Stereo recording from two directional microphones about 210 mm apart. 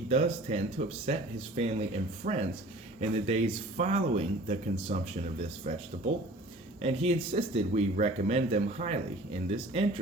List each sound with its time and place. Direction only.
0.1 s speech: 30° right (ahead or behind)
6.8 s speech: 30° right (ahead or behind)